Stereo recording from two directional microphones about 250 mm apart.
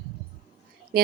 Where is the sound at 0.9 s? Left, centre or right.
Right.